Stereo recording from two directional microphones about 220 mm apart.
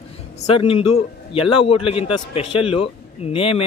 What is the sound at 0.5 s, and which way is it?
Speech, 25° left (ahead or behind).